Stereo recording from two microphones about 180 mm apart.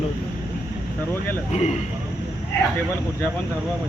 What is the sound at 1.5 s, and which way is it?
Speech, 40° left (ahead or behind).